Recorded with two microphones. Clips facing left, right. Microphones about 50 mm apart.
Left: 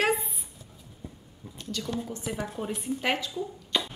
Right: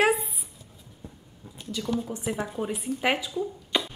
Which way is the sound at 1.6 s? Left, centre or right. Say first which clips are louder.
Right 4 dB; centre.